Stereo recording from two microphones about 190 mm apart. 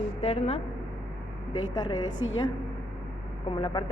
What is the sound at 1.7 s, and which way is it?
Speech, 20° left (ahead or behind).